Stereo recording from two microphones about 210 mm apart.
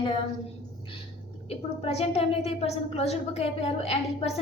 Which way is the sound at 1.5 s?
30° left (ahead or behind).